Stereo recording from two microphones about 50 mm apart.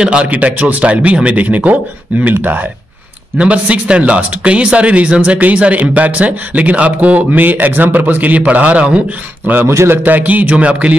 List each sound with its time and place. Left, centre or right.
0.0 s speech: centre
0.3 s speech: right
3.3 s speech: right
9.7 s a man's voice: right
10.0 s speech: right